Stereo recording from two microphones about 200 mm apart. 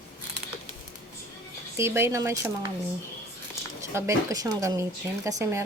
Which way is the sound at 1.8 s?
10° right (ahead or behind).